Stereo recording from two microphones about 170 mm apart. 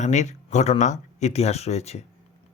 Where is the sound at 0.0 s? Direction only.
45° left (ahead or behind).